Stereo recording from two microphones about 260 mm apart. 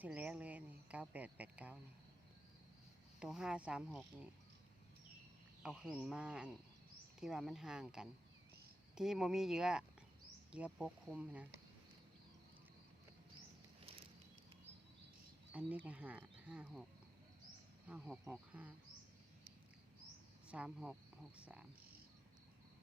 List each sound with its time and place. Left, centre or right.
0.0 s speech: centre
3.2 s speech: centre
5.6 s speech: centre
15.5 s speech: centre
17.8 s speech: centre
20.5 s speech: centre